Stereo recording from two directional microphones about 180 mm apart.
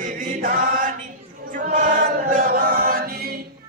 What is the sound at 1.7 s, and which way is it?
Choir, 50° right (ahead or behind).